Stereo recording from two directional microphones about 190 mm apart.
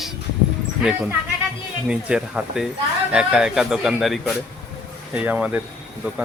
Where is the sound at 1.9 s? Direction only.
5° right (ahead or behind).